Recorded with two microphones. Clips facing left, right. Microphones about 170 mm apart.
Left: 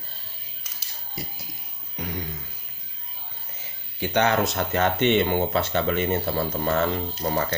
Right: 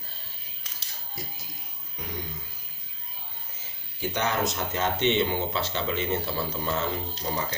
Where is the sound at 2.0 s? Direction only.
75° left (ahead or behind).